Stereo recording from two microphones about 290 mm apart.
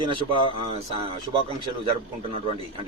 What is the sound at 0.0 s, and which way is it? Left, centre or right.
A man's voice, centre.